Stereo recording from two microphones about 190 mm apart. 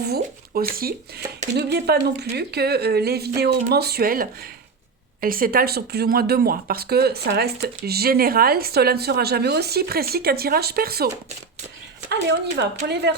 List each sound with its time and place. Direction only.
0.0 s speech: 55° right (ahead or behind)
12.5 s speech: 60° right (ahead or behind)